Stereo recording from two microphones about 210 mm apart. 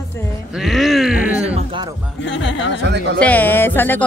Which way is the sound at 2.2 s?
60° left (ahead or behind).